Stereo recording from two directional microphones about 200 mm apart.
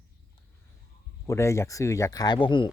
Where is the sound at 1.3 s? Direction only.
15° left (ahead or behind).